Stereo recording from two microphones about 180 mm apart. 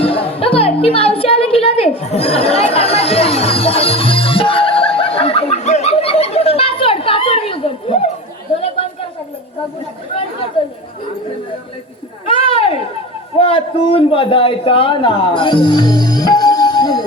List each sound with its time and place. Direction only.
0.0 s music: 30° left (ahead or behind)
12.2 s a sound: 30° left (ahead or behind)
13.3 s a man's voice: 30° left (ahead or behind)